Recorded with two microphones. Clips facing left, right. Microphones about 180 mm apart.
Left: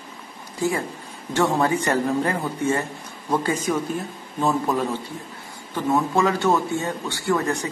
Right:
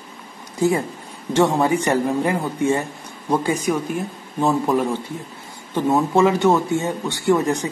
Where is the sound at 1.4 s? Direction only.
15° right (ahead or behind).